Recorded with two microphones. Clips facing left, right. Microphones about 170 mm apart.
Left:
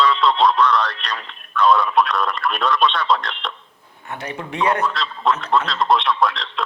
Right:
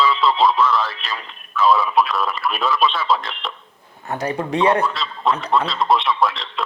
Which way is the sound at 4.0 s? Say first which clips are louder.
Right 6 dB; 40° right (ahead or behind).